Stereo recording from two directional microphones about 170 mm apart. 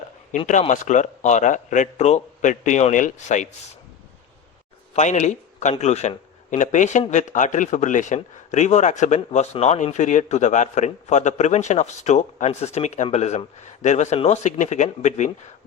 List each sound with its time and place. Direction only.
0.3 s a man's voice: 45° left (ahead or behind)
4.9 s a man's voice: 45° left (ahead or behind)